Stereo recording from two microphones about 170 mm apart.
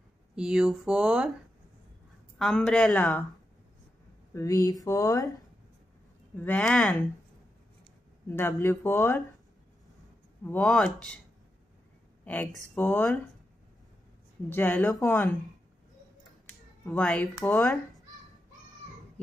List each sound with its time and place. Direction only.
0.4 s speech: 5° right (ahead or behind)
2.3 s speech: centre (ahead or behind)
4.3 s speech: 15° left (ahead or behind)
6.3 s speech: 10° left (ahead or behind)
8.3 s speech: 15° left (ahead or behind)
10.4 s speech: 10° left (ahead or behind)
12.3 s speech: 10° left (ahead or behind)
14.5 s speech: 10° left (ahead or behind)
16.4 s a sound: 10° left (ahead or behind)
17.4 s speech: 15° left (ahead or behind)